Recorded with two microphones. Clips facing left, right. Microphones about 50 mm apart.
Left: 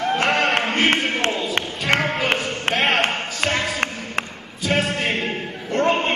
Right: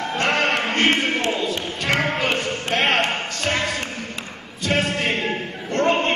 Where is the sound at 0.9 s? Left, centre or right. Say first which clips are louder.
Even; centre.